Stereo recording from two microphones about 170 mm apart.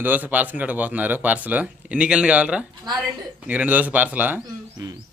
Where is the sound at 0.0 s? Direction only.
10° right (ahead or behind).